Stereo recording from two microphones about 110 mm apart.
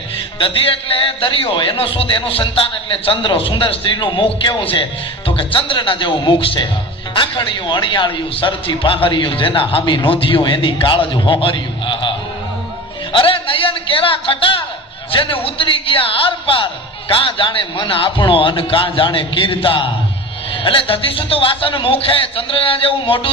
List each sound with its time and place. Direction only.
0.4 s a man's voice: 55° left (ahead or behind)
13.1 s a man's voice: 55° left (ahead or behind)